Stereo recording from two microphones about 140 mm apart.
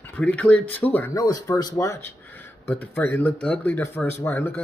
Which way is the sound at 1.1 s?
25° left (ahead or behind).